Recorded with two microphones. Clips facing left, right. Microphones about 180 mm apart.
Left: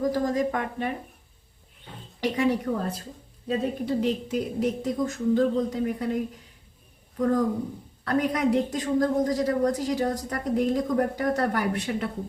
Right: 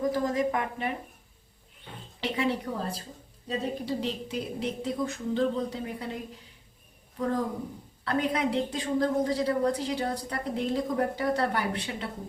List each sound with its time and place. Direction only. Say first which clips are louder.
0.0 s a woman's voice: left 2 dB; 40° left (ahead or behind)
2.2 s a woman's voice: left 5 dB; 45° left (ahead or behind)
3.8 s a woman's voice: left 6 dB; 50° left (ahead or behind)
7.2 s a woman's voice: left 6 dB; 45° left (ahead or behind)